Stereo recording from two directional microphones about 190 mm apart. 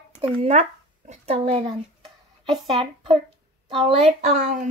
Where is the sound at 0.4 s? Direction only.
35° right (ahead or behind).